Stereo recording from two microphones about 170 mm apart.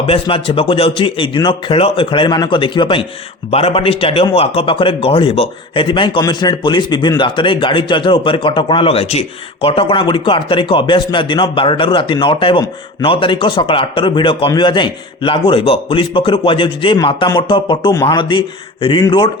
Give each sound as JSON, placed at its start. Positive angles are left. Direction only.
{"t": 0.0, "sound": "a man's voice", "side_deg": 35}